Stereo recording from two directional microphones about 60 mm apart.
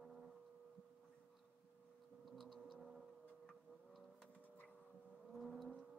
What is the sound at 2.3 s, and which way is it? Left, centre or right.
Computer keyboard, centre.